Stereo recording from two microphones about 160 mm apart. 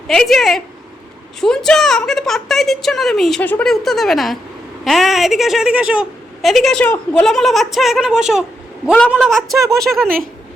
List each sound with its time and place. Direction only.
0.1 s a woman's voice: centre (ahead or behind)
9.6 s speech: 20° right (ahead or behind)
9.8 s a woman's voice: centre (ahead or behind)